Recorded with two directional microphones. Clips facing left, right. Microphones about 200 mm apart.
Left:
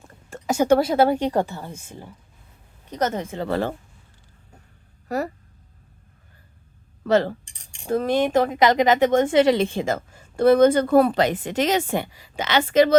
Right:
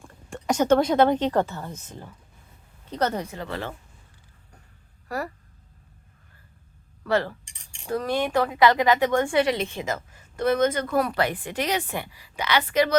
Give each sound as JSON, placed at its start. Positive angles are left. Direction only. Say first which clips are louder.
{"t": 0.0, "sound": "a woman's voice", "louder": "even", "side_deg": 5}
{"t": 3.5, "sound": "speech", "louder": "left 10 dB", "side_deg": 40}
{"t": 5.0, "sound": "speech", "louder": "left 5 dB", "side_deg": 20}
{"t": 7.0, "sound": "a woman's voice", "louder": "left 5 dB", "side_deg": 25}